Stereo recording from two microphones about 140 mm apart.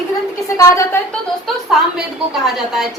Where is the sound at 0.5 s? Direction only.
20° left (ahead or behind).